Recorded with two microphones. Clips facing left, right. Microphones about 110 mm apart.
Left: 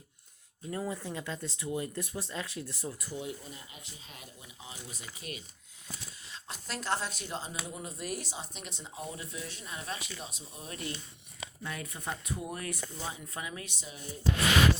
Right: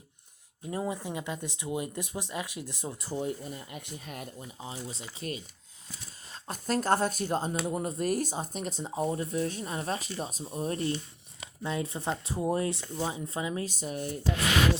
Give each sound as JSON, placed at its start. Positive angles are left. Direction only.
{"t": 0.7, "sound": "speech", "side_deg": -20}
{"t": 3.2, "sound": "speech", "side_deg": -50}
{"t": 6.3, "sound": "speech", "side_deg": -45}
{"t": 11.6, "sound": "speech", "side_deg": -25}
{"t": 13.7, "sound": "speech", "side_deg": -55}